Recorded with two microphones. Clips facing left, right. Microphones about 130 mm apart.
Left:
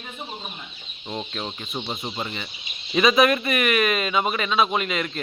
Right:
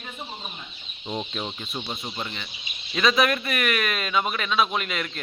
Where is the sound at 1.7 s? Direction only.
20° left (ahead or behind); by 5.2 s 5° left (ahead or behind).